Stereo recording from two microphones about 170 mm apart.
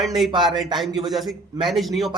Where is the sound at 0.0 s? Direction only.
Centre (ahead or behind).